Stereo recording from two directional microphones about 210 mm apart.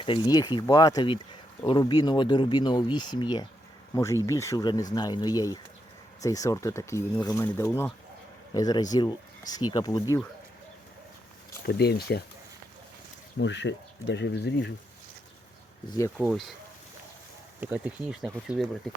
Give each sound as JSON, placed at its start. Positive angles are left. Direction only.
{"t": 0.0, "sound": "speech", "side_deg": 20}
{"t": 11.6, "sound": "speech", "side_deg": 50}
{"t": 13.4, "sound": "speech", "side_deg": 60}
{"t": 15.9, "sound": "speech", "side_deg": 15}
{"t": 16.1, "sound": "speech", "side_deg": 0}
{"t": 17.6, "sound": "speech", "side_deg": -5}